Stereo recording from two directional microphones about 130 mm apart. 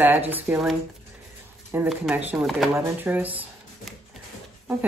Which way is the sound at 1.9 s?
10° right (ahead or behind).